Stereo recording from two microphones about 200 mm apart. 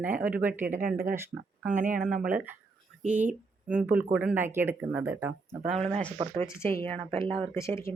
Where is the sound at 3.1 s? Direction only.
5° right (ahead or behind).